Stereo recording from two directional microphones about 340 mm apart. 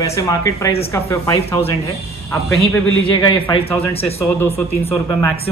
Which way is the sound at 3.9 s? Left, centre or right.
Centre.